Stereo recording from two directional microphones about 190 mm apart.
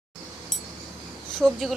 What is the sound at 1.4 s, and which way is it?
Speech, centre (ahead or behind).